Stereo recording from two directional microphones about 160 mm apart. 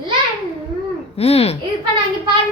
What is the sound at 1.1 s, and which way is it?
Speech, 40° left (ahead or behind).